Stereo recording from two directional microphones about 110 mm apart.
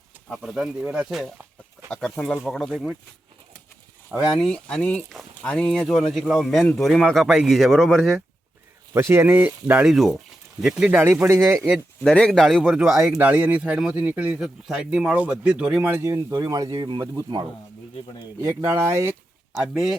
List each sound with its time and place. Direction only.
0.3 s speech: 5° right (ahead or behind)
4.4 s speech: 5° left (ahead or behind)
8.9 s speech: 25° right (ahead or behind)
9.6 s speech: 10° right (ahead or behind)
11.0 s speech: 25° right (ahead or behind)
12.0 s speech: 5° left (ahead or behind)
13.1 s speech: 15° right (ahead or behind)
16.0 s speech: 30° right (ahead or behind)
16.7 s speech: 45° right (ahead or behind)
18.3 s speech: 30° right (ahead or behind)
19.6 s speech: 5° right (ahead or behind)